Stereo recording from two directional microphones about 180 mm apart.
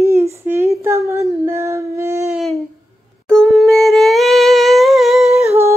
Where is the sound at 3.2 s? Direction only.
5° left (ahead or behind).